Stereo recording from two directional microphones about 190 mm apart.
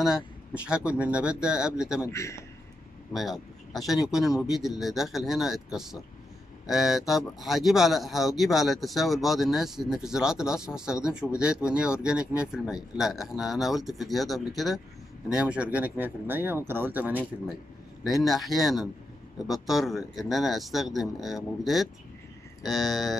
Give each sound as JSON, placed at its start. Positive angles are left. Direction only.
{"t": 0.0, "sound": "speech", "side_deg": -5}
{"t": 2.0, "sound": "a man's voice", "side_deg": 15}
{"t": 3.2, "sound": "speech", "side_deg": 0}